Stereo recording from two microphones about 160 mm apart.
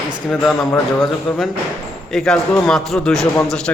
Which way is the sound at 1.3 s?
5° left (ahead or behind).